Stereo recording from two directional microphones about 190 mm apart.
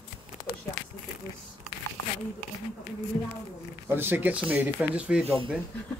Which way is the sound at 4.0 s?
10° right (ahead or behind).